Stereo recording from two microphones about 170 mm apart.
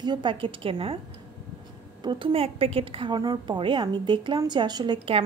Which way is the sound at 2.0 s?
30° right (ahead or behind).